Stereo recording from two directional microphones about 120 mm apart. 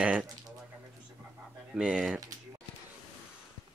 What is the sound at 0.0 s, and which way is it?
Speech, 10° right (ahead or behind).